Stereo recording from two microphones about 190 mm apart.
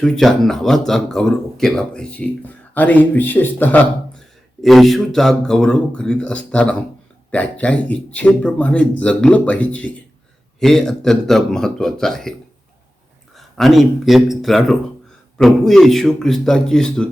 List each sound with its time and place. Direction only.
0.0 s speech: centre (ahead or behind)
13.3 s speech: centre (ahead or behind)